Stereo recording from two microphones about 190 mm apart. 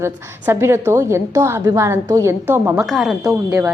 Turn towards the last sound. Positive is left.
turn(degrees=-15)  # may be behind; listen again after turning